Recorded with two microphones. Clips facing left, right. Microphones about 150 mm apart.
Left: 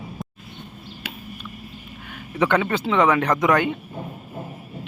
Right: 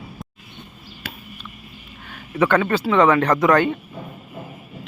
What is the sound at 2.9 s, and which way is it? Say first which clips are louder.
Speech: right 3 dB; 15° left (ahead or behind).